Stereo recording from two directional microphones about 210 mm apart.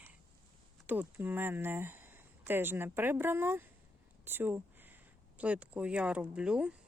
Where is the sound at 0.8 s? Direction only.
10° right (ahead or behind).